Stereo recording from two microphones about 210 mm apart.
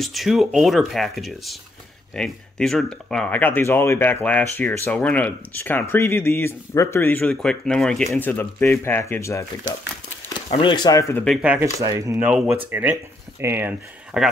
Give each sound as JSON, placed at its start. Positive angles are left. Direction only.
{"t": 0.0, "sound": "speech", "side_deg": 0}
{"t": 10.5, "sound": "speech", "side_deg": 25}
{"t": 11.2, "sound": "speech", "side_deg": -5}